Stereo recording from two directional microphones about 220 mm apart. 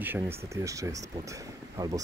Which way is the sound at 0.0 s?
10° right (ahead or behind).